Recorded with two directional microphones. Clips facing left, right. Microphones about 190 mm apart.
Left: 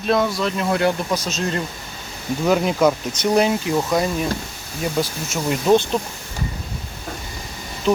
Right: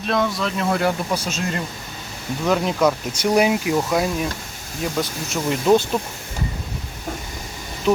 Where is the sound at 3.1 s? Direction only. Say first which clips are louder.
Even; 10° right (ahead or behind).